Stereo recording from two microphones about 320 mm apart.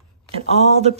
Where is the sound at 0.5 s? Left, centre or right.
Right.